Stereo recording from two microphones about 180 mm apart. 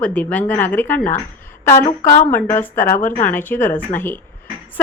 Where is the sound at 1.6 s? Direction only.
15° left (ahead or behind).